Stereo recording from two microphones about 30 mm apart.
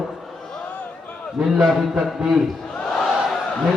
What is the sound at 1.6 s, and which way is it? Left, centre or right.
Speech, centre.